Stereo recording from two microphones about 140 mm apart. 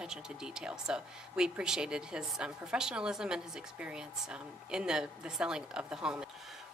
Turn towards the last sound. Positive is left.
turn(degrees=-5)  # may be behind; listen again after turning